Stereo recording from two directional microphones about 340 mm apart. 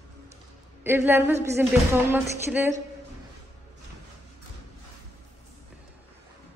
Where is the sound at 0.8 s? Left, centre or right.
Centre.